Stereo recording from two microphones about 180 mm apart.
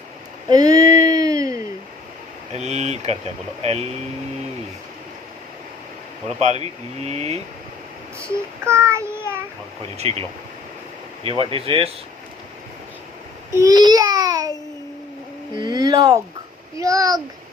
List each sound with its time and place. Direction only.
0.4 s a sound: 20° right (ahead or behind)
2.6 s speech: 40° right (ahead or behind)
6.4 s speech: 35° right (ahead or behind)
8.2 s child singing: 15° right (ahead or behind)
10.0 s speech: 35° right (ahead or behind)
13.6 s babbling: 20° right (ahead or behind)
15.5 s a child's voice: 25° right (ahead or behind)